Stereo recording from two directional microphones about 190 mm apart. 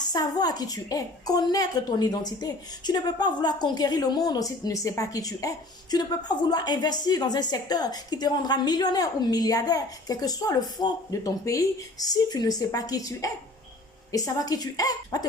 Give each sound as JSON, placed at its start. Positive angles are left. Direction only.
{"t": 0.0, "sound": "a woman's voice", "side_deg": 20}